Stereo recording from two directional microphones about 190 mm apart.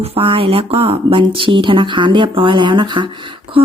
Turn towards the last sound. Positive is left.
turn(degrees=-25)  # may be behind; listen again after turning